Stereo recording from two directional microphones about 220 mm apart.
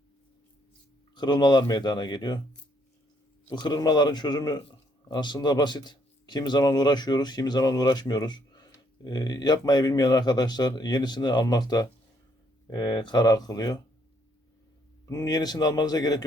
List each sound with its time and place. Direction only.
1.1 s a man's voice: 20° left (ahead or behind)
3.5 s a man's voice: 20° left (ahead or behind)
15.0 s speech: 15° left (ahead or behind)